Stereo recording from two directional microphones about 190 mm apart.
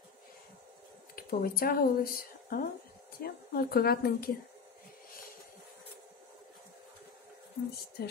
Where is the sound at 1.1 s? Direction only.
50° left (ahead or behind).